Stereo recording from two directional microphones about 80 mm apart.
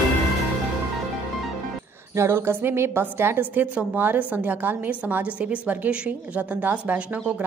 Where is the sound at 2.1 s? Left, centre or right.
Right.